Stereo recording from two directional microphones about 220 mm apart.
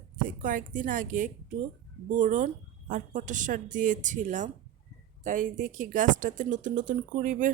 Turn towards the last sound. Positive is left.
turn(degrees=-35)  # may be behind; listen again after turning